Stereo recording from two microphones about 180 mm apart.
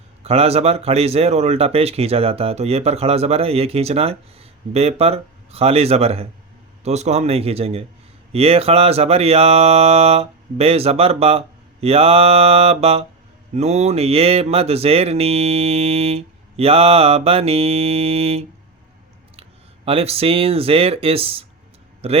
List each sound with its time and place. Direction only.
0.2 s speech: 35° right (ahead or behind)